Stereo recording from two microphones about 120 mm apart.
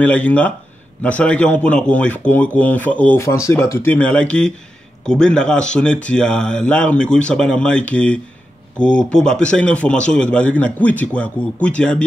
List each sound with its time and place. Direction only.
0.0 s a man's voice: 10° left (ahead or behind)
3.4 s a man's voice: 25° left (ahead or behind); by 12.0 s 10° left (ahead or behind)